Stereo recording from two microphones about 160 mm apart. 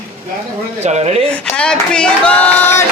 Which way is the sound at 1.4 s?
5° left (ahead or behind).